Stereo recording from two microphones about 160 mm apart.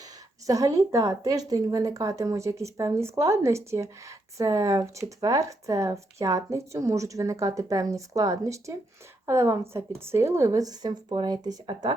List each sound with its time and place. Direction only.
0.0 s speech: 20° right (ahead or behind)